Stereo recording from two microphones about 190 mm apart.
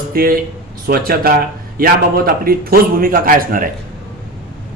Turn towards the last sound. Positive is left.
turn(degrees=-50)  # may be behind; listen again after turning